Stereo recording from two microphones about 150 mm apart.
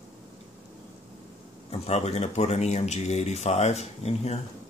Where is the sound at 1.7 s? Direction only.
45° left (ahead or behind).